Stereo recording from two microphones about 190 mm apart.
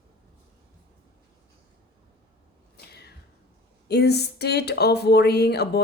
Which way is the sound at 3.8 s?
60° left (ahead or behind).